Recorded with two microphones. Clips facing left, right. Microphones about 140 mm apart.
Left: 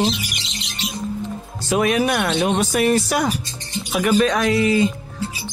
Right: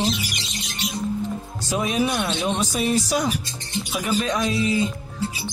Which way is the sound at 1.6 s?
70° left (ahead or behind).